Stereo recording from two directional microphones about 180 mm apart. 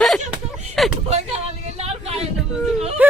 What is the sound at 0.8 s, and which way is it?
Speech, centre (ahead or behind).